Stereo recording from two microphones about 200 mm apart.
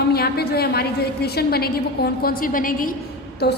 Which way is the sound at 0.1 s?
50° left (ahead or behind).